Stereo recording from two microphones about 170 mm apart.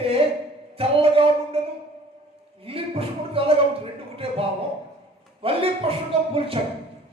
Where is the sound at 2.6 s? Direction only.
35° right (ahead or behind).